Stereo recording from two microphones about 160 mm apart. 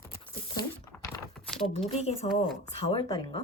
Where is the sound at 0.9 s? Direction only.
10° left (ahead or behind).